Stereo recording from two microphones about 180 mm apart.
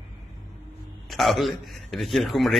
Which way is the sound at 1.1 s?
Centre (ahead or behind).